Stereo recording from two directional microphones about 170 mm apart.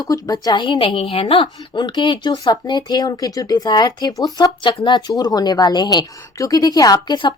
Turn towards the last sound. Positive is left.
turn(degrees=25)  # may be behind; listen again after turning